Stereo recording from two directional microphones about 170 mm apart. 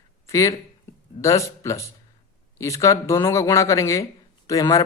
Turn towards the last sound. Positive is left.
turn(degrees=20)  # may be behind; listen again after turning